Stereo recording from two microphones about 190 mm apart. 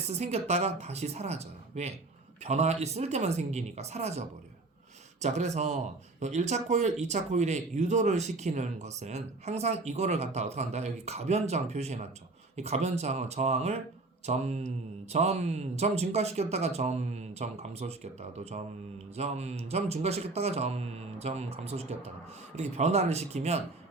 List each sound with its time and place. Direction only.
0.1 s speech: 35° right (ahead or behind)
5.2 s speech: 35° right (ahead or behind)